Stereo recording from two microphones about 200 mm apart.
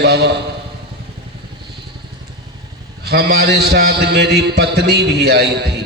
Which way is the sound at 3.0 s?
55° right (ahead or behind).